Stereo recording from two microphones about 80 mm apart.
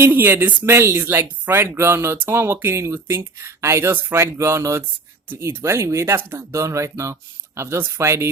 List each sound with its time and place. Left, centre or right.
0.0 s speech: right